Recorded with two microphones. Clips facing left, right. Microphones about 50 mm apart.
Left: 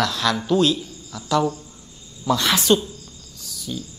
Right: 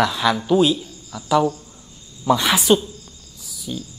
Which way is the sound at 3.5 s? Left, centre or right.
Centre.